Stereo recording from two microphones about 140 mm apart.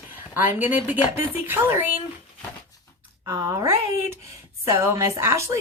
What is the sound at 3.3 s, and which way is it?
A woman's voice, 25° right (ahead or behind).